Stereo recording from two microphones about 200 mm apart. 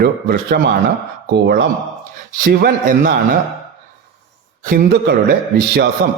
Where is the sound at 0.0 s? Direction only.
50° right (ahead or behind).